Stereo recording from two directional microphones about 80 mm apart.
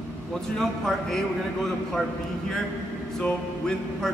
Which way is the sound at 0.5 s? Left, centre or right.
Centre.